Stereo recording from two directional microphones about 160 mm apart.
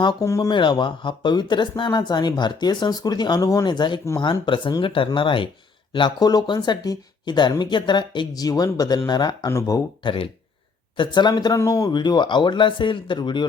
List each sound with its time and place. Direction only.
0.0 s speech: 25° left (ahead or behind)